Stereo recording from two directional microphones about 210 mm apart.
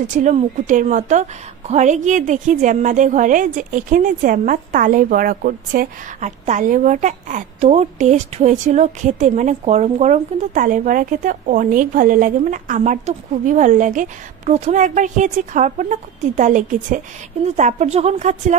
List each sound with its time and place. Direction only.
0.2 s a woman's voice: 35° right (ahead or behind)